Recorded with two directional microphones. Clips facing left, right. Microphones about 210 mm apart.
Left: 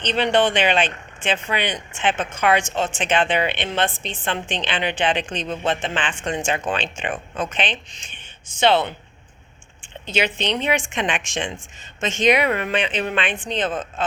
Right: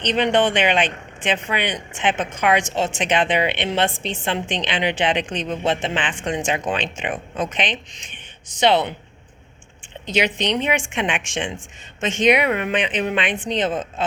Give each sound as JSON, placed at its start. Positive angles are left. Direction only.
{"t": 0.0, "sound": "a woman's voice", "side_deg": -15}
{"t": 10.2, "sound": "speech", "side_deg": -20}